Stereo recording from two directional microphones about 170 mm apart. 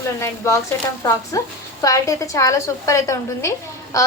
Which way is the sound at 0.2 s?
15° left (ahead or behind).